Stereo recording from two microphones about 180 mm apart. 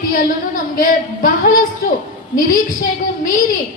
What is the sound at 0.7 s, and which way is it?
Speech, 50° left (ahead or behind).